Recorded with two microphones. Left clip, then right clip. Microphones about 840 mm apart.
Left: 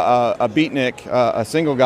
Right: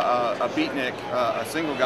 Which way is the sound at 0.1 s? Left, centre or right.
Left.